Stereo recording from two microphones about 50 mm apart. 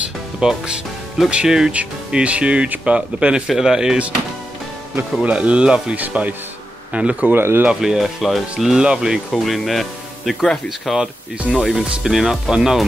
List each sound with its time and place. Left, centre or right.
0.4 s speech: centre
1.7 s speech: right
3.4 s speech: centre
5.2 s a man's voice: right
7.3 s speech: right
7.8 s speech: centre
8.7 s speech: centre
9.3 s speech: centre
11.6 s speech: centre